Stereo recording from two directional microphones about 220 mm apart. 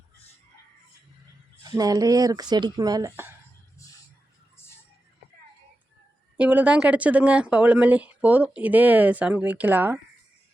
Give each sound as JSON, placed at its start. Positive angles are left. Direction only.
{"t": 1.6, "sound": "speech", "side_deg": -15}
{"t": 6.3, "sound": "speech", "side_deg": -5}